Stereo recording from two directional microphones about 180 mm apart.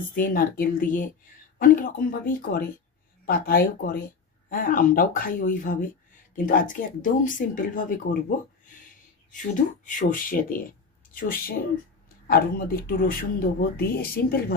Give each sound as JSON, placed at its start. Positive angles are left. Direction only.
{"t": 0.1, "sound": "speech", "side_deg": 50}
{"t": 9.8, "sound": "speech", "side_deg": 45}